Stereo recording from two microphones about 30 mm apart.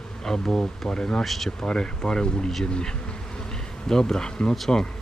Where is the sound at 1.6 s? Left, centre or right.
Left.